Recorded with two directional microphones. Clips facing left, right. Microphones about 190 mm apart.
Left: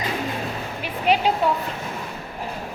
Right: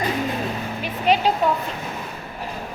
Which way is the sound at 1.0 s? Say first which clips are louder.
Right 1 dB; 10° left (ahead or behind).